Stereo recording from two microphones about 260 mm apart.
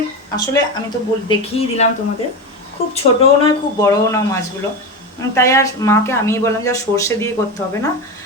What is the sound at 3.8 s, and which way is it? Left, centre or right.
Speech, centre.